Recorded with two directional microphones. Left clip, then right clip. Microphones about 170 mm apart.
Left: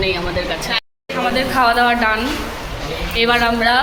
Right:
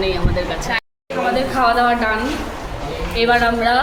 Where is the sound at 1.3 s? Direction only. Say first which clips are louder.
Left 1 dB; 10° left (ahead or behind).